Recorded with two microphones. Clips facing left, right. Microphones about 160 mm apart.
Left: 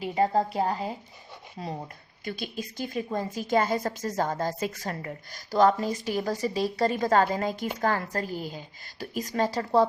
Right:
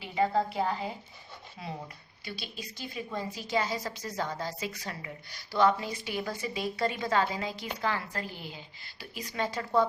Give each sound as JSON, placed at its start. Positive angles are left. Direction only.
{"t": 0.0, "sound": "a woman's voice", "side_deg": 40}